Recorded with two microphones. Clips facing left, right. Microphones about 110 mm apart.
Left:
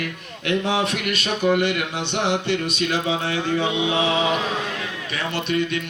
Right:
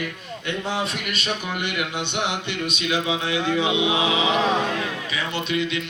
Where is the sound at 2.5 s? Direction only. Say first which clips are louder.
Left 3 dB; 40° left (ahead or behind).